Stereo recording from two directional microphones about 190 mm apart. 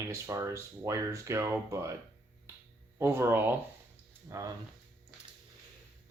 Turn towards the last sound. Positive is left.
turn(degrees=-15)  # may be behind; listen again after turning